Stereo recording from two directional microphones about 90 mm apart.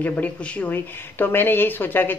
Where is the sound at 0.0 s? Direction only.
15° left (ahead or behind).